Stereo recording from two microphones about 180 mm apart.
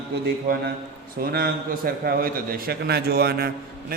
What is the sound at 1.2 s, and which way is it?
A man's voice, 55° right (ahead or behind).